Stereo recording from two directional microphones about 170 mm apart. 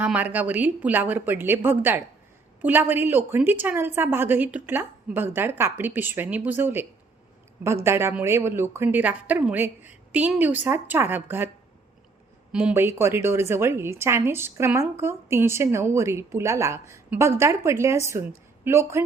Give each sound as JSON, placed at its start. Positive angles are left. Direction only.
{"t": 0.0, "sound": "a woman's voice", "side_deg": -10}
{"t": 7.9, "sound": "a woman's voice", "side_deg": -15}
{"t": 12.5, "sound": "a woman's voice", "side_deg": -5}